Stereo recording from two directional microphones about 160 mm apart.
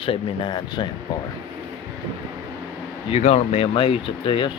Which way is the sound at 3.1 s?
40° left (ahead or behind).